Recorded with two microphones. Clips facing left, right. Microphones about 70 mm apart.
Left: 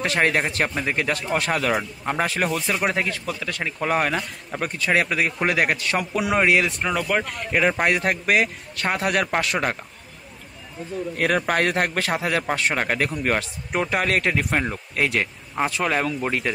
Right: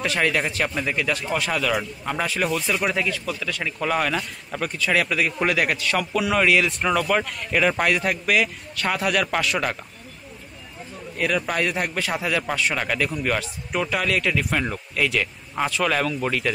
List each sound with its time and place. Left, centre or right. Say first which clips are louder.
0.0 s a man's voice: left 1 dB; left
6.8 s a man's voice: right 2 dB; centre
7.9 s a man's voice: left 1 dB; left
11.1 s speech: left 2 dB; left
12.1 s a man's voice: left 1 dB; left
15.7 s a man's voice: right 3 dB; left